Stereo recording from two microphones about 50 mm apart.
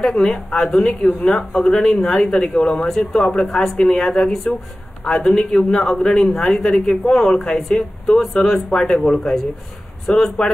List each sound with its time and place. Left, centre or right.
0.1 s speech: centre
2.6 s speech: centre
2.9 s speech: centre